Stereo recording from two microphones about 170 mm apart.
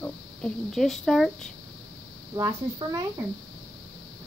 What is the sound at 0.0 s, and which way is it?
Speech, 5° left (ahead or behind).